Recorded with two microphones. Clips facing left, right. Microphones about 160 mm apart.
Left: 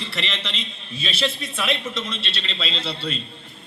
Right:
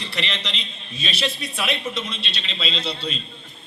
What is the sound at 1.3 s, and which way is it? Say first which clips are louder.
Speech: left 1 dB; 25° left (ahead or behind).